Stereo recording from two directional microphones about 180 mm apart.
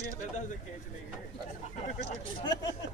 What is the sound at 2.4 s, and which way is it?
Speech, 20° left (ahead or behind).